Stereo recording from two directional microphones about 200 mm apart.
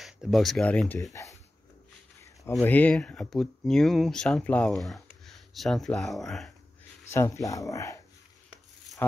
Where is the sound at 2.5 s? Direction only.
10° left (ahead or behind).